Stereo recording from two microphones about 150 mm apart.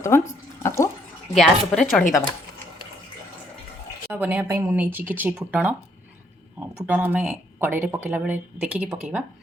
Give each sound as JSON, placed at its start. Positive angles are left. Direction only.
{"t": 0.0, "sound": "speech", "side_deg": 20}
{"t": 1.3, "sound": "speech", "side_deg": 0}
{"t": 4.1, "sound": "speech", "side_deg": -10}